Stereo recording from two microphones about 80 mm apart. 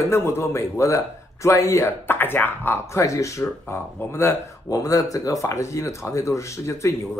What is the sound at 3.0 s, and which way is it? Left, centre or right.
Speech, left.